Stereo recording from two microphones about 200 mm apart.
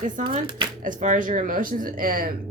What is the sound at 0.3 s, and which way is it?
Speech, 25° right (ahead or behind).